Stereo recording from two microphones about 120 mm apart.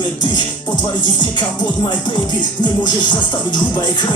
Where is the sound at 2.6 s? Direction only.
40° left (ahead or behind).